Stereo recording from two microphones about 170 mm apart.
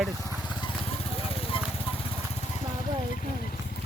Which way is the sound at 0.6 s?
35° left (ahead or behind).